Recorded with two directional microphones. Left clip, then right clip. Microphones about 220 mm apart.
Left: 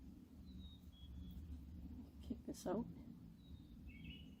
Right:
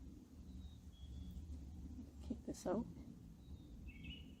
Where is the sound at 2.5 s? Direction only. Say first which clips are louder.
Right 2 dB; 25° right (ahead or behind).